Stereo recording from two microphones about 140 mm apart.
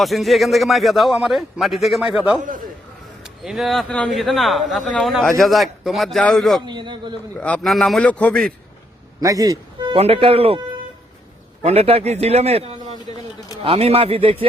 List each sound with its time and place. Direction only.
0.0 s a man's voice: centre (ahead or behind)
6.7 s a man's voice: 35° right (ahead or behind)
7.3 s a man's voice: 10° left (ahead or behind)
9.2 s speech: 25° right (ahead or behind)
9.9 s a man's voice: 45° right (ahead or behind)
11.6 s a man's voice: 45° right (ahead or behind)